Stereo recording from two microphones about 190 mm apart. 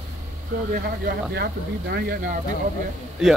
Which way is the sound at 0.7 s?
55° right (ahead or behind).